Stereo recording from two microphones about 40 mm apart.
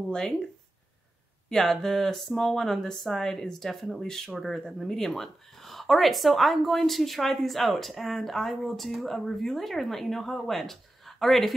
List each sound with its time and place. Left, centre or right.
0.1 s speech: centre
1.5 s speech: centre